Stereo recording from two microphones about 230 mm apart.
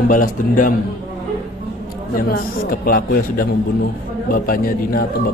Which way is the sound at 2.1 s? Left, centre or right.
Left.